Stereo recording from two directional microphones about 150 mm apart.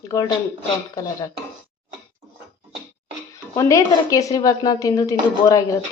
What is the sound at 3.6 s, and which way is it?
Speech, 20° left (ahead or behind).